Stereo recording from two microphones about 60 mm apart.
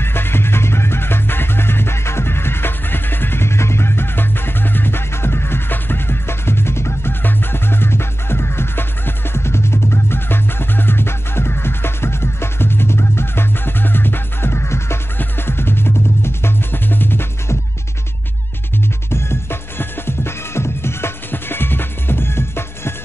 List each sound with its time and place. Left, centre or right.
0.0 s music: left
19.0 s music: left